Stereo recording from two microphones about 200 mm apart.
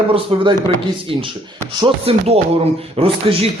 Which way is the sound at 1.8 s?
30° right (ahead or behind).